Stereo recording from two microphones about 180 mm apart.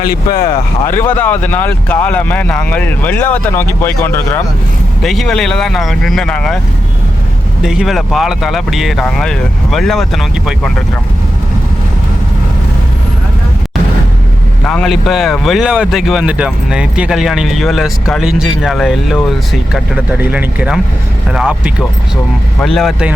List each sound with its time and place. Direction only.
0.0 s speech: 55° left (ahead or behind)
0.9 s speech: 10° left (ahead or behind)
5.0 s speech: centre (ahead or behind)
7.6 s speech: 5° right (ahead or behind)
14.6 s speech: 5° left (ahead or behind)